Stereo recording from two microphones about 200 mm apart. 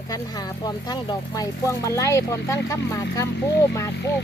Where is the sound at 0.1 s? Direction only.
20° left (ahead or behind).